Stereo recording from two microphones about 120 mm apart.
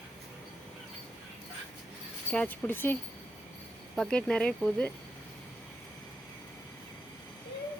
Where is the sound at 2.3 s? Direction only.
10° left (ahead or behind).